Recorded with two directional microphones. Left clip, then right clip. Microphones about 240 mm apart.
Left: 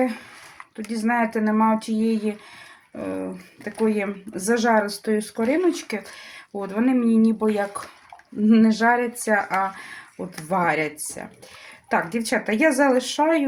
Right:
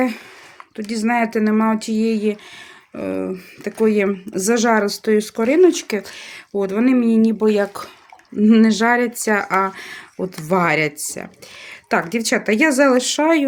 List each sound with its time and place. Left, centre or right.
0.9 s speech: right